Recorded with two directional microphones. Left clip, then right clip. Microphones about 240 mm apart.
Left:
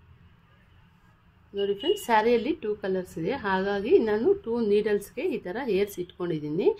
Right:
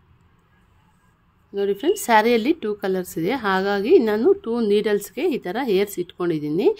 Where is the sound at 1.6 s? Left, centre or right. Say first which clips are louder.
Right 5 dB; right.